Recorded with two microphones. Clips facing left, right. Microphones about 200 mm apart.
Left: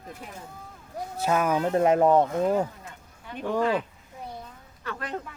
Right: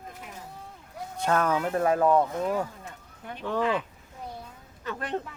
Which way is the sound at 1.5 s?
20° left (ahead or behind).